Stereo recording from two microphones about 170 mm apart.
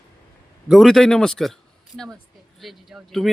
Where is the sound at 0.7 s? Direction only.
Centre (ahead or behind).